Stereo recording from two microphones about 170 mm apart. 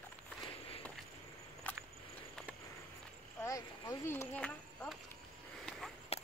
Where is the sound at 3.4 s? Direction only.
20° left (ahead or behind).